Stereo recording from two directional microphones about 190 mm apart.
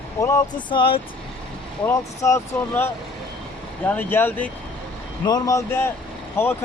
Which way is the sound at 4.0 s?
10° left (ahead or behind).